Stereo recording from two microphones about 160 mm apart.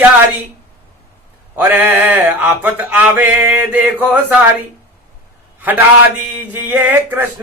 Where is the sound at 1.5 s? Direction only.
10° right (ahead or behind).